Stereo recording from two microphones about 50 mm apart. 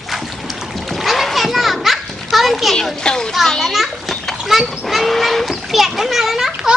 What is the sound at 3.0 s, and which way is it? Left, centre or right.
Speech, centre.